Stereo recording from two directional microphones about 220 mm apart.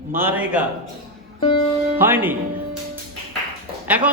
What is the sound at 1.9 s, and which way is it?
Speech, 10° right (ahead or behind).